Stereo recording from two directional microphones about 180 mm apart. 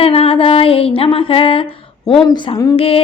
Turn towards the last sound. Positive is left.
turn(degrees=30)  # may be behind; listen again after turning